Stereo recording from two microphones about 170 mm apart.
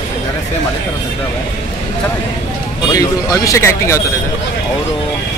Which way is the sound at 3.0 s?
20° left (ahead or behind).